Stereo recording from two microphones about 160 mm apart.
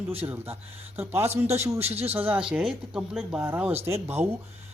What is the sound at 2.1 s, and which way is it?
Speech, 10° right (ahead or behind).